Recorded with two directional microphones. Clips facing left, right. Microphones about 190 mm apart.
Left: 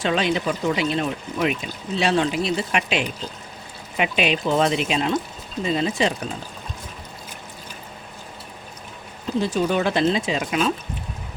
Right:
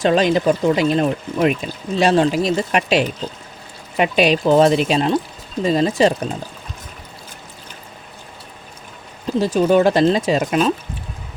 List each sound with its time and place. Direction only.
0.0 s speech: 40° right (ahead or behind)
9.4 s speech: 40° right (ahead or behind)